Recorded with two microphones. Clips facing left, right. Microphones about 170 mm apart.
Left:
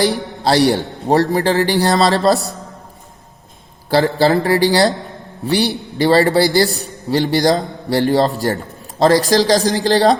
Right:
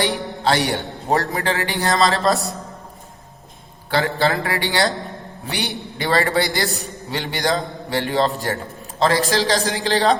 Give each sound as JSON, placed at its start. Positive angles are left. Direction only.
{"t": 0.0, "sound": "a man's voice", "side_deg": 40}
{"t": 3.8, "sound": "a man's voice", "side_deg": 35}